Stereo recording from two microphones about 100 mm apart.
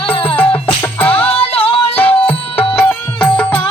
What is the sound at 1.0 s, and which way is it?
Music, 15° left (ahead or behind).